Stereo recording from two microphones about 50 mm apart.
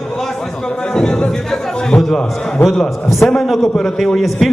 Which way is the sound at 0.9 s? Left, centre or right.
Centre.